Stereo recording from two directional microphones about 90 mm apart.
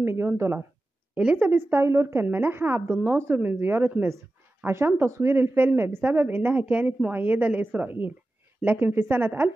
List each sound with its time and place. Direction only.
0.0 s speech: 30° right (ahead or behind)
1.1 s speech: 15° right (ahead or behind)